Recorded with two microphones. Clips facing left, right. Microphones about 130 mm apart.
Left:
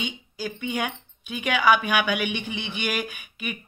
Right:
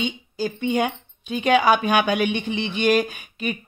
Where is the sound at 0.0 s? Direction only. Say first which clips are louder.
Right 6 dB; 35° right (ahead or behind).